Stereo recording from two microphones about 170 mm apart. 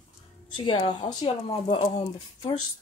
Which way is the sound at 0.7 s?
25° left (ahead or behind).